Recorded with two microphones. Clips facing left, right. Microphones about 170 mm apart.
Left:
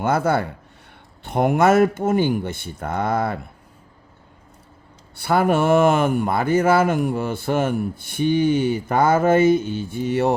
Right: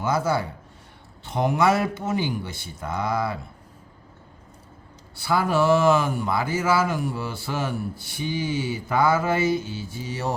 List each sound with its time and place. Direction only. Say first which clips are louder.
0.0 s speech: left 4 dB; 55° left (ahead or behind)
5.1 s speech: left 4 dB; 60° left (ahead or behind)